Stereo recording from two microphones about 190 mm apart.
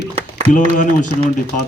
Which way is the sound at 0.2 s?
35° right (ahead or behind).